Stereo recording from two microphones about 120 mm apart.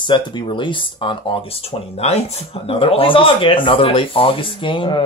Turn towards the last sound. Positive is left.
turn(degrees=45)  # may be behind; listen again after turning